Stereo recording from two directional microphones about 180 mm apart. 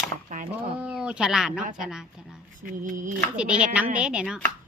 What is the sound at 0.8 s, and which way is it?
Speech, 5° right (ahead or behind).